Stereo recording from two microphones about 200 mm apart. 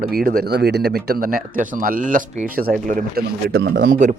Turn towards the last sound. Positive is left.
turn(degrees=-40)  # may be behind; listen again after turning